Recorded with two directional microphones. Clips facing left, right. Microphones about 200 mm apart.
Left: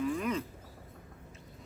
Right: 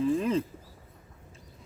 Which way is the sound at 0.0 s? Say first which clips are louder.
Right 6 dB; 30° right (ahead or behind).